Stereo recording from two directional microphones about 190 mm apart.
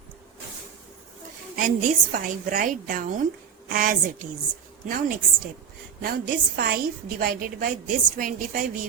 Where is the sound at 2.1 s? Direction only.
45° right (ahead or behind).